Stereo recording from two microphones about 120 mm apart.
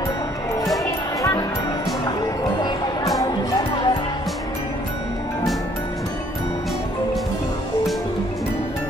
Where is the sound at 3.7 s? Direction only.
45° left (ahead or behind).